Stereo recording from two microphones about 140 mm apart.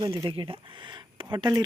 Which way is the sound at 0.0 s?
35° right (ahead or behind).